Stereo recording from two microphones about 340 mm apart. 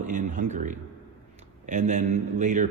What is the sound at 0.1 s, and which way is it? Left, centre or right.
A man's voice, right.